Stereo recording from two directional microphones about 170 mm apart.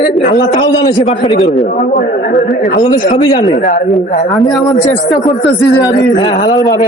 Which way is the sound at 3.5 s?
55° left (ahead or behind).